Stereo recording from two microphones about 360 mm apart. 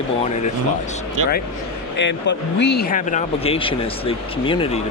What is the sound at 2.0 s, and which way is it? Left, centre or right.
Speech, left.